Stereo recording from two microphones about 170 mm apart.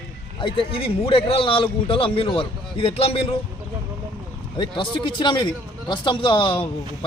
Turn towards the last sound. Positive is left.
turn(degrees=30)  # may be behind; listen again after turning